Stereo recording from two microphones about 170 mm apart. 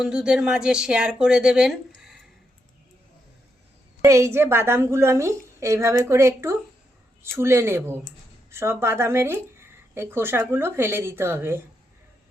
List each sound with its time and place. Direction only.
0.0 s speech: 5° right (ahead or behind)
2.0 s a sound: centre (ahead or behind)
4.0 s speech: 15° right (ahead or behind)